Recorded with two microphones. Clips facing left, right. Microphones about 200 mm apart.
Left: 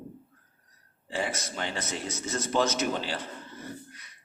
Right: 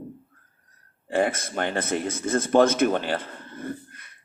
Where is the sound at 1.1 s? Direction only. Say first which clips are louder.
Right 8 dB; 55° right (ahead or behind).